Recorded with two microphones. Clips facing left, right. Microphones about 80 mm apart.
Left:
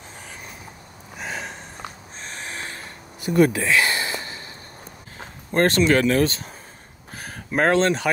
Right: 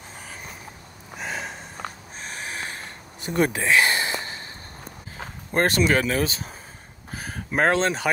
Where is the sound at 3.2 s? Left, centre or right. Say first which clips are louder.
Left 5 dB; right.